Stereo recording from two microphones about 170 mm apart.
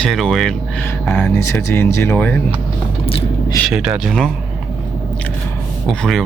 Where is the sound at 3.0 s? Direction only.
35° left (ahead or behind).